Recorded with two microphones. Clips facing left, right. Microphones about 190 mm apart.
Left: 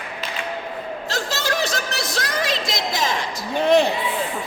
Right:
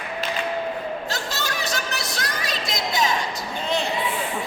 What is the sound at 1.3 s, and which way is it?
A woman's voice, 90° left.